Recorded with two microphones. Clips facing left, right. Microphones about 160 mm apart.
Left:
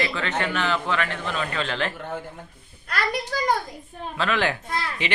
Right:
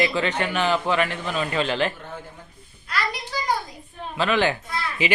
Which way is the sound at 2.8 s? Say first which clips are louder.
Left 2 dB; 55° left (ahead or behind).